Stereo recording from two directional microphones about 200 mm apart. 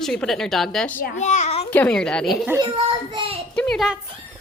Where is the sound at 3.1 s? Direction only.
25° right (ahead or behind).